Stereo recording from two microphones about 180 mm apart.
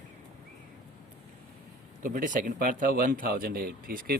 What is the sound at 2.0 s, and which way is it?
Speech, 50° right (ahead or behind).